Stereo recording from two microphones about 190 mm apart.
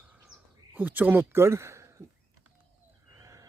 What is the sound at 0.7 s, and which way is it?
Speech, 10° right (ahead or behind).